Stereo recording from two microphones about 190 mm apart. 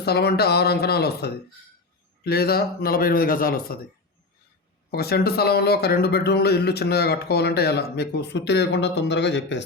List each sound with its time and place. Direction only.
0.0 s a man's voice: 60° left (ahead or behind)
4.9 s speech: 55° left (ahead or behind)